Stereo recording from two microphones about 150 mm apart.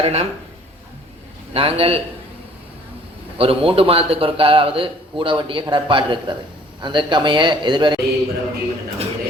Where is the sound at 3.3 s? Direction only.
40° right (ahead or behind).